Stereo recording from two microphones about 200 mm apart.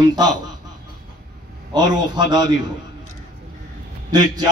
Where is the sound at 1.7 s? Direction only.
20° right (ahead or behind).